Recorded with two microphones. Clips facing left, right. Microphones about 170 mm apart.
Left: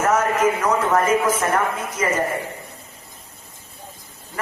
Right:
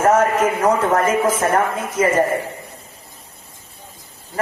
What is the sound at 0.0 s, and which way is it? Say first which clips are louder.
A man's voice: right 3 dB; 30° right (ahead or behind).